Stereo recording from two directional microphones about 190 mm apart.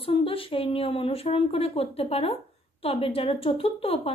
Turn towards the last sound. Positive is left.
turn(degrees=30)  # may be behind; listen again after turning